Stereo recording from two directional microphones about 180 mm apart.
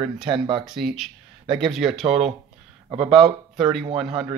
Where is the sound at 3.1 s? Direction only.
Centre (ahead or behind).